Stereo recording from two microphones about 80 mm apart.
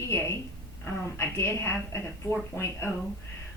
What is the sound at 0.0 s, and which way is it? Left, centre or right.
A woman's voice, left.